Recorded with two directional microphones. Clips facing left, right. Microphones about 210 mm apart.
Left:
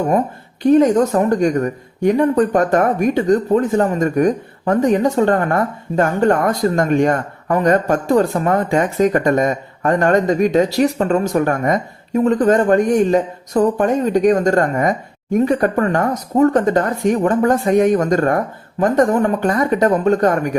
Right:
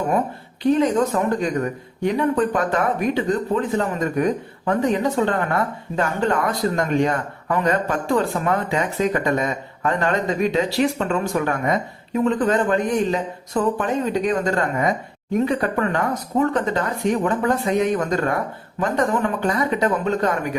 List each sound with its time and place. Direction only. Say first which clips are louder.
0.6 s speech: left 6 dB; 45° left (ahead or behind)